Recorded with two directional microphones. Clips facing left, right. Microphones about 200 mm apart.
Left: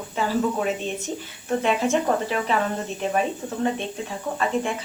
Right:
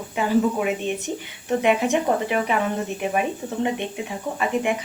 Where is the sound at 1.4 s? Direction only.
15° right (ahead or behind).